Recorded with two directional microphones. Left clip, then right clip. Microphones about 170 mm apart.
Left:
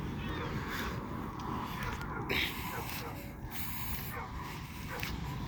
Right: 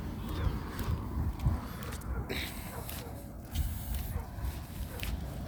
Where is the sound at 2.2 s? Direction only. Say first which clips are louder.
Left 5 dB; 30° right (ahead or behind).